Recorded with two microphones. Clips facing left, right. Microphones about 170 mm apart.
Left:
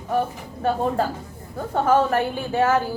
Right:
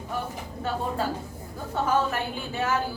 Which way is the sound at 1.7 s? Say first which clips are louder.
Left 6 dB; 50° left (ahead or behind).